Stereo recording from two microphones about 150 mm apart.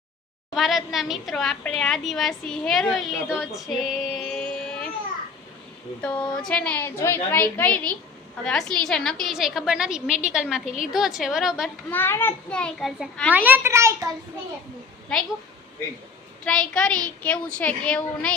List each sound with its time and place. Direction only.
0.5 s a woman's voice: centre (ahead or behind)
6.0 s a woman's voice: 5° left (ahead or behind)
11.9 s a woman's voice: 15° left (ahead or behind)
13.3 s a child's voice: 10° right (ahead or behind)
16.5 s a woman's voice: 5° left (ahead or behind)